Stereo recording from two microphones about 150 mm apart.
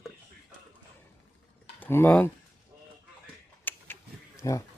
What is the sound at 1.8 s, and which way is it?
Speech, 15° left (ahead or behind).